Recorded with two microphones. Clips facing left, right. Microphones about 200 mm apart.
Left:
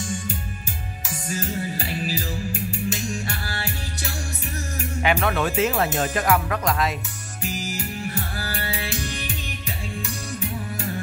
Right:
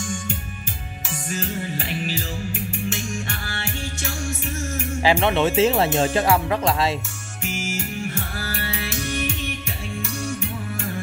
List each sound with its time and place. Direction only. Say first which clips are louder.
2.5 s music: right 1 dB; 40° left (ahead or behind)
5.0 s speech: right 4 dB; 25° right (ahead or behind)
7.4 s music: right 1 dB; 35° left (ahead or behind)